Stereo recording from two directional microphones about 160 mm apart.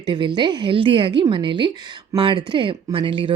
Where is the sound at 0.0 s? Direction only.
30° right (ahead or behind).